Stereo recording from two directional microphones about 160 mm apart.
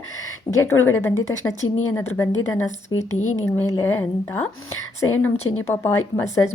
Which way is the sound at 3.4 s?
15° left (ahead or behind).